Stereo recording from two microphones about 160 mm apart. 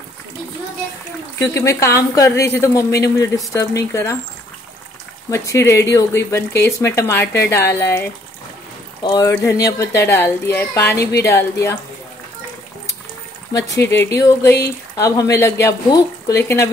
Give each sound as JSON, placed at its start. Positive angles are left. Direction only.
{"t": 1.4, "sound": "speech", "side_deg": 15}
{"t": 5.3, "sound": "speech", "side_deg": 20}
{"t": 9.0, "sound": "speech", "side_deg": 25}
{"t": 13.5, "sound": "speech", "side_deg": 20}